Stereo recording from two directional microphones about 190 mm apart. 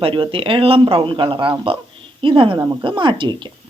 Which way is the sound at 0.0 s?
25° right (ahead or behind).